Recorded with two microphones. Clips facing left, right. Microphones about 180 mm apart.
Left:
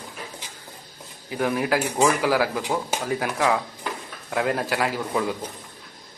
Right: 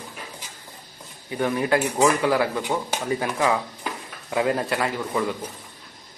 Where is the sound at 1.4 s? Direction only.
5° left (ahead or behind).